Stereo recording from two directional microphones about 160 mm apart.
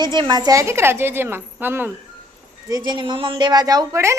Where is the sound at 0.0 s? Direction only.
30° right (ahead or behind); by 1.9 s 10° right (ahead or behind).